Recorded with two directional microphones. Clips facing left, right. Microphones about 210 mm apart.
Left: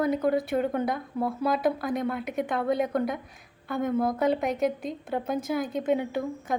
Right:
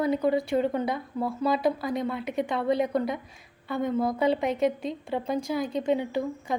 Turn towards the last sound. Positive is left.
turn(degrees=0)  # may be behind; listen again after turning